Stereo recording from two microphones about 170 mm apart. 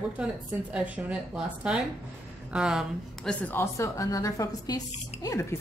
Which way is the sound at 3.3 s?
10° left (ahead or behind).